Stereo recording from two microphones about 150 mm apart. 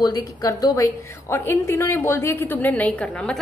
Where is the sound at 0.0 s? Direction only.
25° left (ahead or behind).